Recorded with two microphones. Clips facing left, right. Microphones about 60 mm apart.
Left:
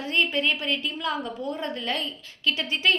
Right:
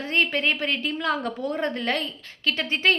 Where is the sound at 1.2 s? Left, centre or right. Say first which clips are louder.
Right 3 dB; right.